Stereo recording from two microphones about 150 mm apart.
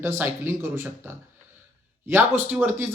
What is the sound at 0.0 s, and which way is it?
Speech, 15° right (ahead or behind).